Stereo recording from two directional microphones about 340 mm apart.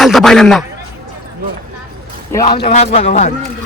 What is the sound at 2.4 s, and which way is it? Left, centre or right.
Speech, left.